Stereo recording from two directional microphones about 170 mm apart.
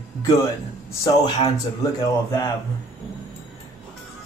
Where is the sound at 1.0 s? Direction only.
25° left (ahead or behind).